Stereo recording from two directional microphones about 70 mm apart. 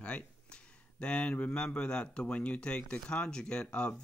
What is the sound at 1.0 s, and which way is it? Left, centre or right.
A man's voice, centre.